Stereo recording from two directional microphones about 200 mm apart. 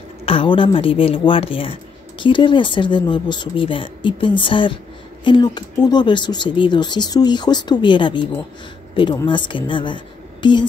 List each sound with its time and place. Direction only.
0.2 s a woman's voice: 30° left (ahead or behind)